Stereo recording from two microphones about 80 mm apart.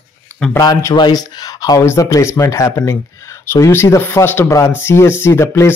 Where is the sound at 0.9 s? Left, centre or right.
Left.